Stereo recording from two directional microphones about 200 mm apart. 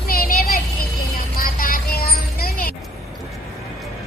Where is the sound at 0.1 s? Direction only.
45° left (ahead or behind).